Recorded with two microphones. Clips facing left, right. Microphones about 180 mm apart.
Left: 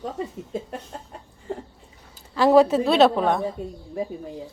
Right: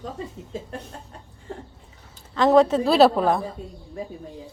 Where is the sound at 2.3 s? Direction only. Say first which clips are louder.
Left 1 dB; 10° left (ahead or behind).